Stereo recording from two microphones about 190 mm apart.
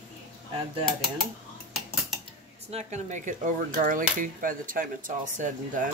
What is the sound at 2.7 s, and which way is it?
Speech, 40° right (ahead or behind).